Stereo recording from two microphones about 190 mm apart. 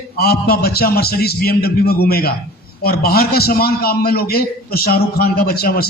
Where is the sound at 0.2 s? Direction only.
55° left (ahead or behind).